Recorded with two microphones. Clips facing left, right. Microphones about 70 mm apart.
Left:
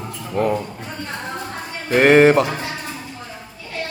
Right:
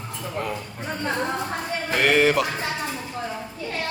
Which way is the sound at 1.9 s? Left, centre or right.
Left.